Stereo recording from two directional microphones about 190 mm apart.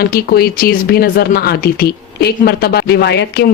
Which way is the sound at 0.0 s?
55° left (ahead or behind).